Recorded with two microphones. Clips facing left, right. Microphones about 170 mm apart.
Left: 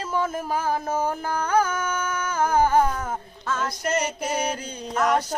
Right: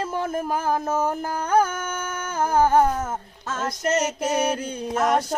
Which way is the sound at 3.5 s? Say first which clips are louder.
Right 1 dB; 45° right (ahead or behind).